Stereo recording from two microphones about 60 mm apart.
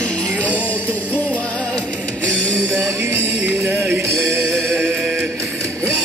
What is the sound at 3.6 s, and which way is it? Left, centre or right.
Music, right.